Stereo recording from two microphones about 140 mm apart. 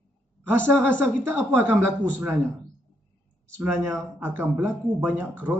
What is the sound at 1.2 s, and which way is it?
Speech, 15° right (ahead or behind).